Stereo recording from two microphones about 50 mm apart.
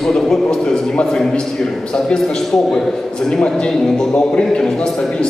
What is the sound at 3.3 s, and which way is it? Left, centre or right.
A man's voice, centre.